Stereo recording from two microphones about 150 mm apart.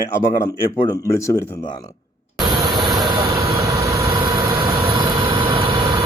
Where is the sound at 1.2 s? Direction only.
20° left (ahead or behind).